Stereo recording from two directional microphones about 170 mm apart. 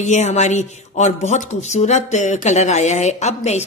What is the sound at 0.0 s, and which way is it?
Speech, 40° left (ahead or behind).